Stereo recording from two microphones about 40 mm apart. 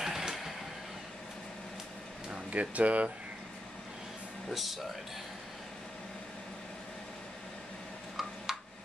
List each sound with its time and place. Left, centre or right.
0.0 s vehicle: centre
2.5 s speech: right
4.5 s speech: centre
8.5 s music: centre